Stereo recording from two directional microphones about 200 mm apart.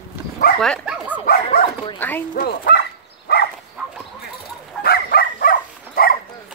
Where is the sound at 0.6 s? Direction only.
Centre (ahead or behind).